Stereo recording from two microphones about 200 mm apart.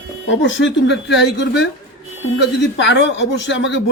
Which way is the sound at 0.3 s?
65° left (ahead or behind).